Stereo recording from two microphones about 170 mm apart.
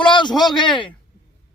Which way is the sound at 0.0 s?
25° left (ahead or behind).